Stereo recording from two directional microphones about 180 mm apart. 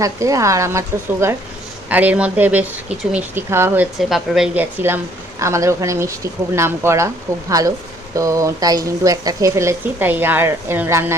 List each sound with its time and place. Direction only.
0.0 s a woman's voice: 20° right (ahead or behind)
4.1 s a woman's voice: 5° right (ahead or behind)